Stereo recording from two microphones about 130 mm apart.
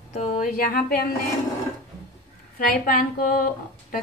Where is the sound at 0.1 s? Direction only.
80° left.